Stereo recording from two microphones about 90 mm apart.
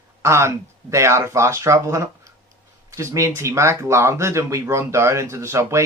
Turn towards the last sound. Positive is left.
turn(degrees=-35)  # may be behind; listen again after turning